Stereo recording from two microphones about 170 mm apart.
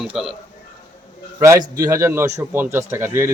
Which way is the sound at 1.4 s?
20° right (ahead or behind).